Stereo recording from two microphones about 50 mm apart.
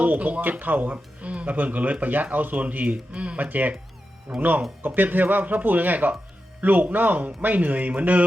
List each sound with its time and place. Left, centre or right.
0.0 s speech: right